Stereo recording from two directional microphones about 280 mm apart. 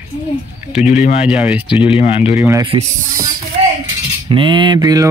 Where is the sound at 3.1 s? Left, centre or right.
Right.